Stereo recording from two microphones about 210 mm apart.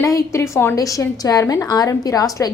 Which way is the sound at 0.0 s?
15° left (ahead or behind).